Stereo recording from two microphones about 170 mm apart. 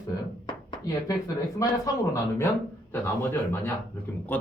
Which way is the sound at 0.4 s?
25° left (ahead or behind).